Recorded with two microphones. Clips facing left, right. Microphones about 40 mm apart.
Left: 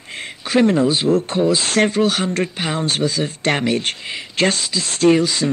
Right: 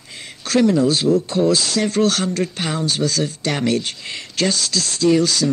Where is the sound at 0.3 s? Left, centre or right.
Left.